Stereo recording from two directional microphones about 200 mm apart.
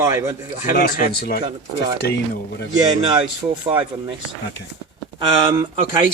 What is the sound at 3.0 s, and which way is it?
Speech, 25° right (ahead or behind).